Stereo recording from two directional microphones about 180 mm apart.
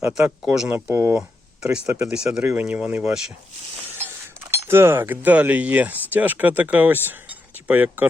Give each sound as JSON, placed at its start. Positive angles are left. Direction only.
{"t": 0.0, "sound": "speech", "side_deg": -5}
{"t": 0.9, "sound": "speech", "side_deg": -15}
{"t": 4.7, "sound": "speech", "side_deg": -15}